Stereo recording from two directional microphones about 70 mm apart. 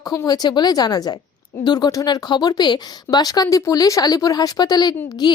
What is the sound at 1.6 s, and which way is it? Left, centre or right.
A woman's voice, left.